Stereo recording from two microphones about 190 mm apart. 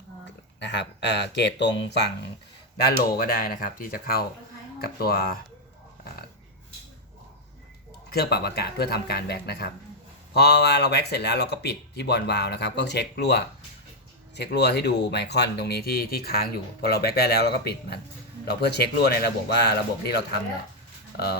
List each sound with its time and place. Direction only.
0.6 s speech: 65° left (ahead or behind)
3.0 s speech: 50° left (ahead or behind)
8.1 s speech: 55° left (ahead or behind)